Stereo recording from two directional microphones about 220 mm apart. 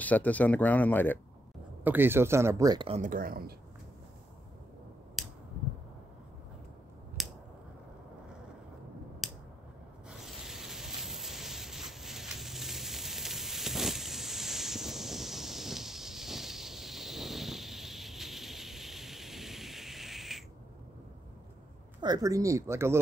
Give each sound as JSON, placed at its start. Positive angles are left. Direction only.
{"t": 0.0, "sound": "speech", "side_deg": 5}
{"t": 1.9, "sound": "speech", "side_deg": -10}
{"t": 3.0, "sound": "speech", "side_deg": -40}
{"t": 5.2, "sound": "a sound", "side_deg": 0}
{"t": 7.2, "sound": "a sound", "side_deg": 0}
{"t": 9.2, "sound": "finger snapping", "side_deg": 0}
{"t": 10.0, "sound": "sanding", "side_deg": 0}
{"t": 22.0, "sound": "speech", "side_deg": -15}